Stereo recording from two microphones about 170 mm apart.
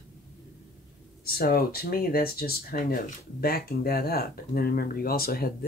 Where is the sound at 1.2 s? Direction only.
65° left (ahead or behind).